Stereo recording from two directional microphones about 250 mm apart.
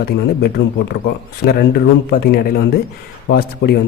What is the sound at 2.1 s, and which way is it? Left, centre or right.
Speech, left.